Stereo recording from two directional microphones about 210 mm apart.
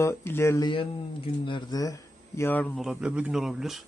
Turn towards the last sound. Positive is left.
turn(degrees=0)  # may be behind; listen again after turning